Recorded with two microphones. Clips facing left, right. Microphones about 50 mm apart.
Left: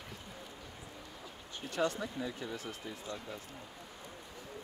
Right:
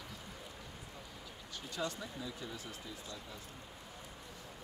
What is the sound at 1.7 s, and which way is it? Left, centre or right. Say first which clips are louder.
Speech: left 7 dB; left.